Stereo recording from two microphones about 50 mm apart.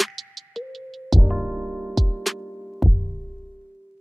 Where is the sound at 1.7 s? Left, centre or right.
Centre.